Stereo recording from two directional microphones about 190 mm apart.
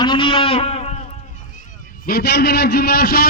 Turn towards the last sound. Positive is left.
turn(degrees=55)  # may be behind; listen again after turning